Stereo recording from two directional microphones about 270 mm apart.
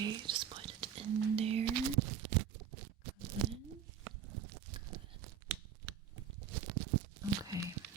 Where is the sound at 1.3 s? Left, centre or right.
Right.